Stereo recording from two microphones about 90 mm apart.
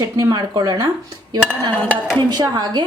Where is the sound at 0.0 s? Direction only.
50° right (ahead or behind).